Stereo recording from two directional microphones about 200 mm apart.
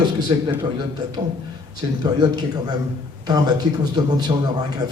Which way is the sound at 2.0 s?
20° right (ahead or behind).